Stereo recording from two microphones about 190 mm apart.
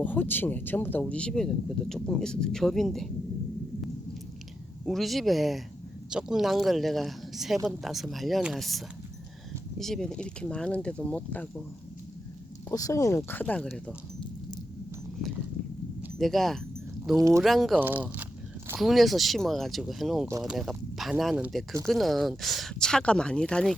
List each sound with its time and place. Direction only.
0.0 s speech: 10° left (ahead or behind)
4.9 s speech: centre (ahead or behind)
12.7 s speech: 15° left (ahead or behind)
16.1 s speech: centre (ahead or behind)
17.2 s speech: 15° right (ahead or behind)
17.4 s speech: centre (ahead or behind)